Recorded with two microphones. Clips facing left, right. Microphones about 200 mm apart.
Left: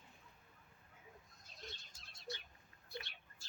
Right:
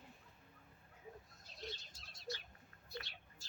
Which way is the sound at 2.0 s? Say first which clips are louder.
Left 1 dB; 55° left (ahead or behind).